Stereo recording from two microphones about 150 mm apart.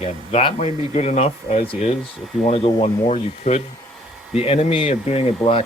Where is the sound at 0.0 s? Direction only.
40° left (ahead or behind).